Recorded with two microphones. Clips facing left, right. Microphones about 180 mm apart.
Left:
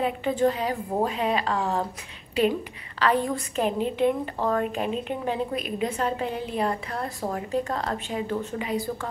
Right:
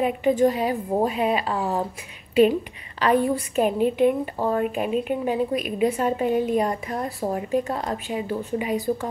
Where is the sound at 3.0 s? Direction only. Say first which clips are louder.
Right 4 dB; 15° right (ahead or behind).